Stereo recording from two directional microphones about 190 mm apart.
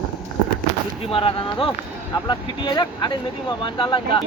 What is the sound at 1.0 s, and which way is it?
Speech, 30° left (ahead or behind).